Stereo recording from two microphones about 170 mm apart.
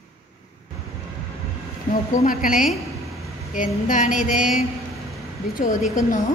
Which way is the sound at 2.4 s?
50° left (ahead or behind).